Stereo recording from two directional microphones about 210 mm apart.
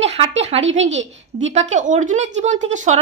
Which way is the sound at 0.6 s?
60° right (ahead or behind).